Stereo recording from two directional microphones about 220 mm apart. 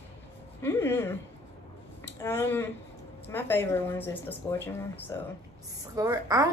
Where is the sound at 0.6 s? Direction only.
10° left (ahead or behind).